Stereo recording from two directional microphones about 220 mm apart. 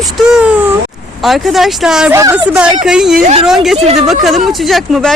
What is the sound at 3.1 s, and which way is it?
Speech, 35° right (ahead or behind).